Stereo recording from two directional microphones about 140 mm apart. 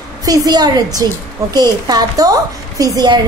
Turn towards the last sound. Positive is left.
turn(degrees=-25)  # may be behind; listen again after turning